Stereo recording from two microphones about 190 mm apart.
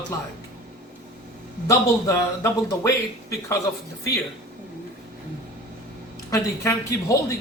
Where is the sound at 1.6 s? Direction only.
15° left (ahead or behind).